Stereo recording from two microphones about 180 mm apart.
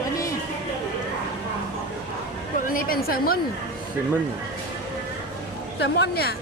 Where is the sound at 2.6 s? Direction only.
50° left (ahead or behind).